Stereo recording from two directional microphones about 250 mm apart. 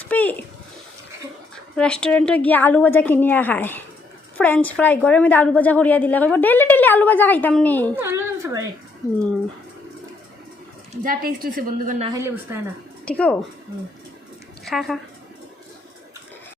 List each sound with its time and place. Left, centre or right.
0.0 s a sound: centre
1.7 s a woman's voice: centre
7.9 s a sound: centre
11.0 s a woman's voice: right
12.1 s speech: centre
13.1 s speech: centre
14.6 s speech: centre